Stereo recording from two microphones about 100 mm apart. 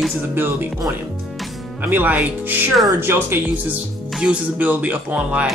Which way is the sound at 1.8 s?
15° right (ahead or behind).